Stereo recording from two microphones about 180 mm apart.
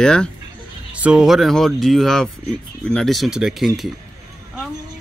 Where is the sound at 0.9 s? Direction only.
5° right (ahead or behind).